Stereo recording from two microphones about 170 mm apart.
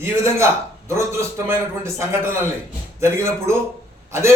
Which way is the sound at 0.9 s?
15° right (ahead or behind).